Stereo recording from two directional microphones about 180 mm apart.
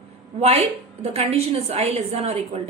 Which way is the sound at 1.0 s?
35° right (ahead or behind).